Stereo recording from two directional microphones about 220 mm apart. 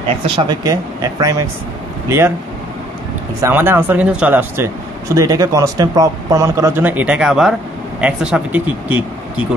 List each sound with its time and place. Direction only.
0.4 s speech: 15° right (ahead or behind)
3.4 s speech: 10° right (ahead or behind)